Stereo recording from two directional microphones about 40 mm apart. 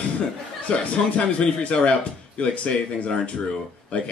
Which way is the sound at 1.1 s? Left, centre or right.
Left.